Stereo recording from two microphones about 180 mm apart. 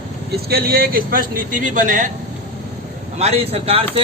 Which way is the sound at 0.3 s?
60° right (ahead or behind).